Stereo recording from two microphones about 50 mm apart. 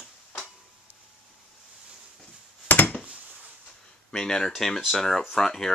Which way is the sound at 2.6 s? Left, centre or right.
Left.